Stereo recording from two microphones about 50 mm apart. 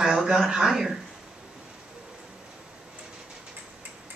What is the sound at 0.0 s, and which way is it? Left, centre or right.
Speech, centre.